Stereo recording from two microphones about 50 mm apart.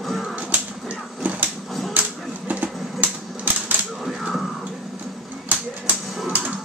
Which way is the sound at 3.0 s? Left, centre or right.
Right.